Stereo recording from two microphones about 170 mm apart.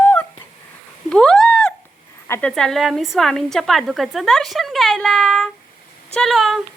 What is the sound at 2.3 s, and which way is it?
A woman's voice, 5° left (ahead or behind).